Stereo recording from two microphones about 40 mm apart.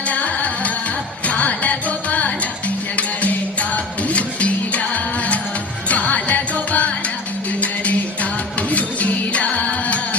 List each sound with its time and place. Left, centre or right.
0.1 s music: left
5.9 s music: left